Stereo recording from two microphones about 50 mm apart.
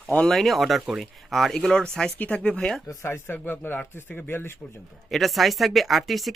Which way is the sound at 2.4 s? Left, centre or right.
Centre.